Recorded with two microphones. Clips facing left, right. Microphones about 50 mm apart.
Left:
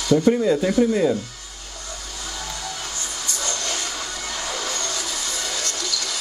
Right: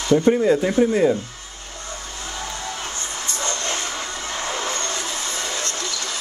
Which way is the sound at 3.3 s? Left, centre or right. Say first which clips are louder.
Right 2 dB; right.